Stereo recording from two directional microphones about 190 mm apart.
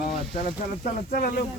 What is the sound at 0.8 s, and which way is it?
Speech, 50° left (ahead or behind).